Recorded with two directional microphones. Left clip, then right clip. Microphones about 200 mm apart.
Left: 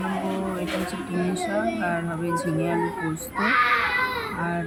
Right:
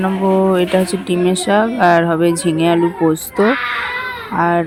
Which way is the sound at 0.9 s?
45° right (ahead or behind).